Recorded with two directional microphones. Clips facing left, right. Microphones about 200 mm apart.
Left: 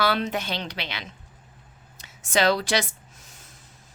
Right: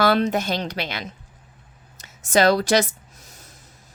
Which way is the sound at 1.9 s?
40° right (ahead or behind).